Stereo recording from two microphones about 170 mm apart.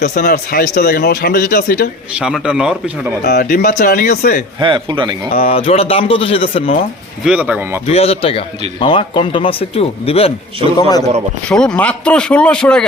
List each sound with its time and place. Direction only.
0.0 s speech: 65° left (ahead or behind)
2.1 s speech: 5° right (ahead or behind)
3.2 s speech: 65° left (ahead or behind)
4.6 s a man's voice: 30° right (ahead or behind)
5.5 s speech: 35° left (ahead or behind)
7.3 s speech: 5° right (ahead or behind)
7.9 s speech: 35° left (ahead or behind)
10.8 s a man's voice: 20° left (ahead or behind)
11.4 s speech: 5° left (ahead or behind)